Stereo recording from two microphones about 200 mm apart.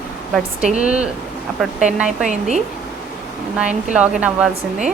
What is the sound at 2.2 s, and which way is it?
Speech, 35° right (ahead or behind).